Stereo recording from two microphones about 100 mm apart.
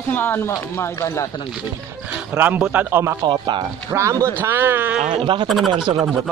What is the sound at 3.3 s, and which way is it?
Speech, 50° right (ahead or behind).